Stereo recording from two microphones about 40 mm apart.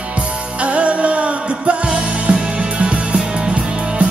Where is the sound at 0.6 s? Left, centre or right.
Right.